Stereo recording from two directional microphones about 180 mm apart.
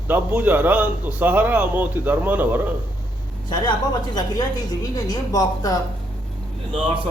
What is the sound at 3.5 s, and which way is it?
A woman's voice, 25° left (ahead or behind).